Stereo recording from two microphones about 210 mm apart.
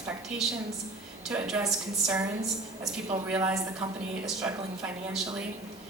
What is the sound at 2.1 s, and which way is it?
A woman's voice, 15° right (ahead or behind).